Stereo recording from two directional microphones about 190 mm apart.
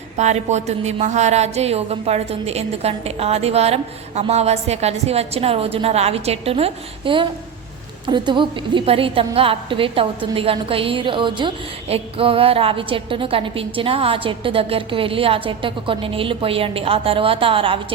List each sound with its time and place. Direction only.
0.2 s a woman's voice: 35° right (ahead or behind)